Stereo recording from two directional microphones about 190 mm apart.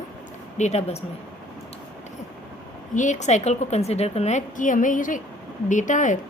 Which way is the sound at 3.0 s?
40° left (ahead or behind).